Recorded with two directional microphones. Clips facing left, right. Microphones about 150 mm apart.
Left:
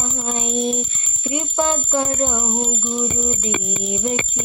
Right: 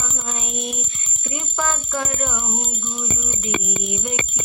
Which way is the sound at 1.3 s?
25° left (ahead or behind).